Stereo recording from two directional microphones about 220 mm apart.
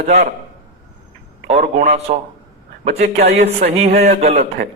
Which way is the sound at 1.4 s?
30° right (ahead or behind).